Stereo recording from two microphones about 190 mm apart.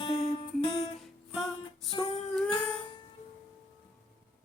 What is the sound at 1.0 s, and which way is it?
Music, centre (ahead or behind).